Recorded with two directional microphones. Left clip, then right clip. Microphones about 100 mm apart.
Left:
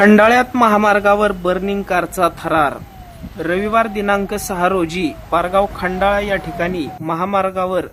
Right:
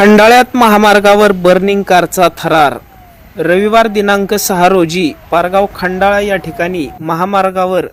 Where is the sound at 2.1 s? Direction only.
35° right (ahead or behind).